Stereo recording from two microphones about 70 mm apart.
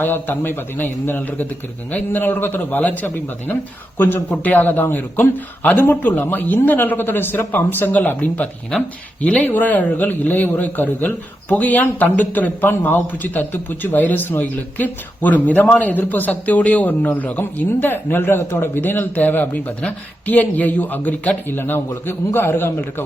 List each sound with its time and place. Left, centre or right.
0.0 s a man's voice: left